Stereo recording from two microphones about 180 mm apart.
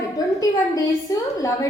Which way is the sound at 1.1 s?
20° left (ahead or behind).